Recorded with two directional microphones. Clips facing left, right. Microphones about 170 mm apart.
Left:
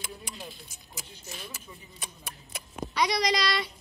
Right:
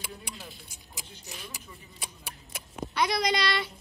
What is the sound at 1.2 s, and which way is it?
A woman's voice, 15° right (ahead or behind).